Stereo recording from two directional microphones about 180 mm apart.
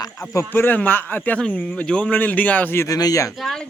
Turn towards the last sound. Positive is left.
turn(degrees=0)  # may be behind; listen again after turning